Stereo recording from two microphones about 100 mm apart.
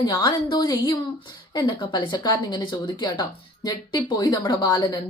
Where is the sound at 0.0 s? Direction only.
45° left (ahead or behind).